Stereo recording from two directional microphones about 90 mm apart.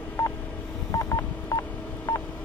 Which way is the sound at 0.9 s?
40° left (ahead or behind).